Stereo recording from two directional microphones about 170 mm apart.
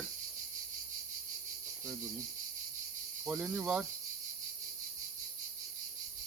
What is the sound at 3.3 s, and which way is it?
Speech, 5° right (ahead or behind).